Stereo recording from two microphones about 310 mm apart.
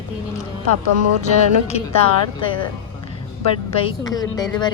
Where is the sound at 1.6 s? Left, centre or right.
Centre.